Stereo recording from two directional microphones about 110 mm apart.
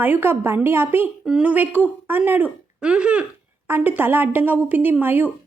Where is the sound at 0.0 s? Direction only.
20° right (ahead or behind).